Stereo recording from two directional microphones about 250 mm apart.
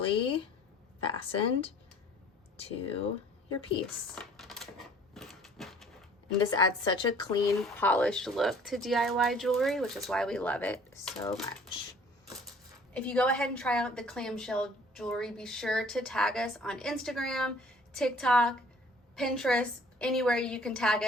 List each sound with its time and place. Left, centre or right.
0.0 s a woman's voice: left
4.1 s typewriter: centre
6.5 s a woman's voice: centre
7.6 s a woman's voice: centre
12.9 s a woman's voice: centre